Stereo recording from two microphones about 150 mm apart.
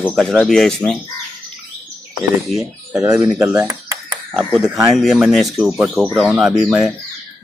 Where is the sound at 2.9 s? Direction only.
20° right (ahead or behind).